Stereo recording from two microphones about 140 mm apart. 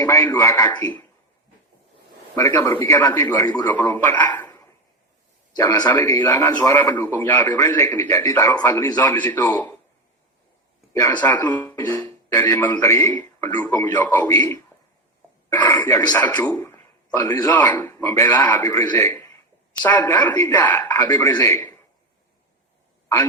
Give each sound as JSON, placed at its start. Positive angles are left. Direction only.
{"t": 0.0, "sound": "a man's voice", "side_deg": 20}
{"t": 0.7, "sound": "a man's voice", "side_deg": 30}
{"t": 2.3, "sound": "a man's voice", "side_deg": 15}
{"t": 5.5, "sound": "a man's voice", "side_deg": 25}
{"t": 5.9, "sound": "a man's voice", "side_deg": 15}
{"t": 11.2, "sound": "a man's voice", "side_deg": 10}
{"t": 14.3, "sound": "a man's voice", "side_deg": 30}
{"t": 15.5, "sound": "a man's voice", "side_deg": 15}
{"t": 17.5, "sound": "a man's voice", "side_deg": 10}
{"t": 18.6, "sound": "a man's voice", "side_deg": 25}
{"t": 20.3, "sound": "a man's voice", "side_deg": 25}
{"t": 20.6, "sound": "a man's voice", "side_deg": 15}
{"t": 21.1, "sound": "a man's voice", "side_deg": 25}